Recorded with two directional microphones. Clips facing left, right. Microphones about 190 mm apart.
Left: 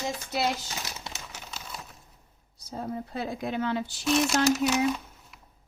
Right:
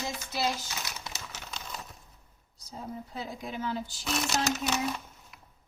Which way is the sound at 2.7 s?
70° left (ahead or behind).